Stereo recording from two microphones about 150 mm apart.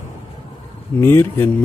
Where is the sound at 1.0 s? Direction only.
15° left (ahead or behind).